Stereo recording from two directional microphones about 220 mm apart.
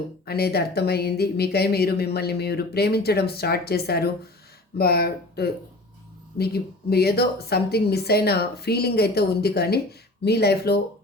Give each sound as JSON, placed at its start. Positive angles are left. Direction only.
{"t": 0.3, "sound": "speech", "side_deg": 45}